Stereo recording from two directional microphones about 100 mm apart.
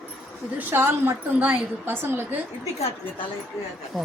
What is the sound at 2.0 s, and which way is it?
Speech, 20° right (ahead or behind).